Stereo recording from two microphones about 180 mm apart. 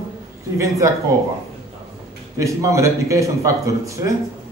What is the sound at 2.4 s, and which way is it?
Speech, 15° right (ahead or behind).